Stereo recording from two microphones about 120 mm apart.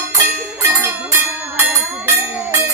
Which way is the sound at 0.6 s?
20° right (ahead or behind).